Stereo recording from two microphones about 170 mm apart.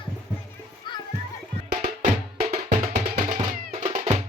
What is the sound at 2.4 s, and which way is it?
Music, 40° right (ahead or behind).